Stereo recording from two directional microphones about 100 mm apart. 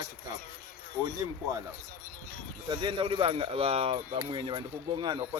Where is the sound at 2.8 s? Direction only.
60° right (ahead or behind); by 4.0 s 85° right.